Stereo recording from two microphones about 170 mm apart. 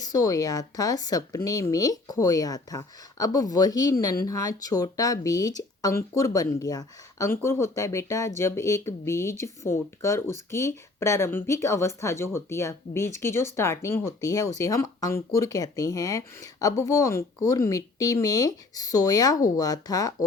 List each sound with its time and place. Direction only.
0.0 s speech: 20° left (ahead or behind)